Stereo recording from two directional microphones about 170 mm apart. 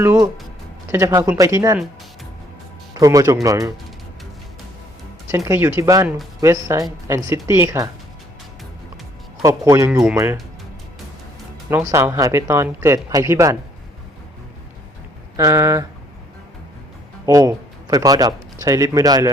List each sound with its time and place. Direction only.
0.0 s speech: 15° right (ahead or behind)
2.9 s speech: 20° right (ahead or behind)
5.5 s speech: 15° right (ahead or behind)
9.4 s speech: 20° right (ahead or behind)
11.7 s speech: 15° right (ahead or behind)
15.4 s speech: 20° right (ahead or behind)
17.2 s a man's voice: 20° right (ahead or behind)